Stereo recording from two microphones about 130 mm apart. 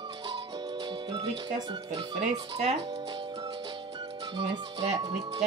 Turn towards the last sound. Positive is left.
turn(degrees=-35)  # may be behind; listen again after turning